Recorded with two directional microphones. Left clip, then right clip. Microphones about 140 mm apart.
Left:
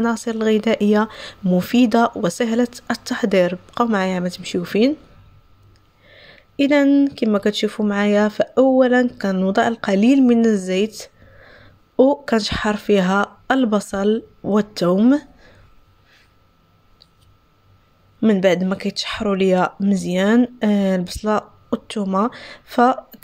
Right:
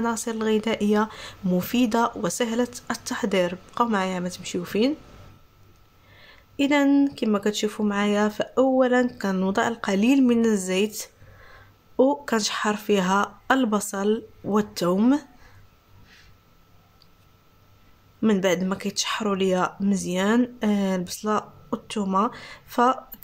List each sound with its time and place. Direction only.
0.0 s speech: 35° left (ahead or behind)
6.1 s speech: 30° left (ahead or behind)
18.2 s speech: 30° left (ahead or behind)